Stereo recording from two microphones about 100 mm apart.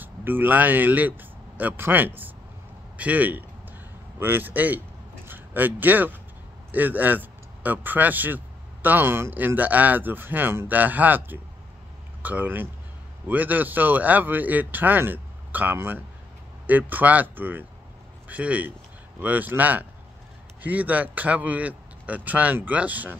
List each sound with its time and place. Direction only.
0.0 s a man's voice: 20° right (ahead or behind)